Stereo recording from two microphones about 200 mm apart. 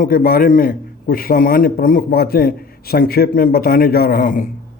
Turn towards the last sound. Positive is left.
turn(degrees=45)  # may be behind; listen again after turning